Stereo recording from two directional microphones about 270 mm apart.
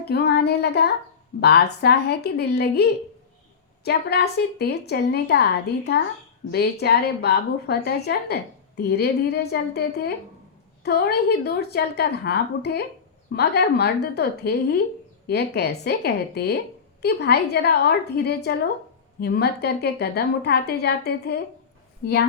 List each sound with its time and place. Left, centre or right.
0.1 s a woman's voice: left
6.5 s a woman's voice: left